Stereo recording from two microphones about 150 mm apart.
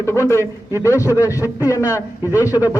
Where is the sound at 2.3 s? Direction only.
10° right (ahead or behind).